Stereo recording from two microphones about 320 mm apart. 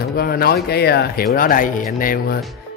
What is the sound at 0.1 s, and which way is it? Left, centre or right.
Speech, left.